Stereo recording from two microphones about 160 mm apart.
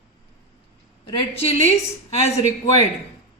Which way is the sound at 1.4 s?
40° left (ahead or behind).